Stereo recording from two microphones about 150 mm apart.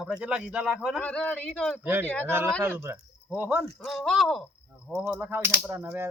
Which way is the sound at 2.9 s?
20° right (ahead or behind).